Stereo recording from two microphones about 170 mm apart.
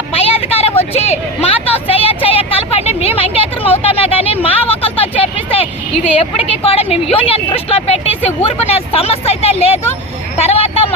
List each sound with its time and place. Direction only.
0.2 s vehicle: 35° left (ahead or behind)
0.9 s a woman's voice: 40° left (ahead or behind)
1.9 s a sound: 35° left (ahead or behind)
4.4 s vehicle: 35° left (ahead or behind)
6.7 s speech: 35° left (ahead or behind)